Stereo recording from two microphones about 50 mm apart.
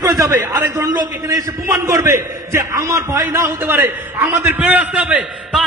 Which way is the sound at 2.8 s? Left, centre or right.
Right.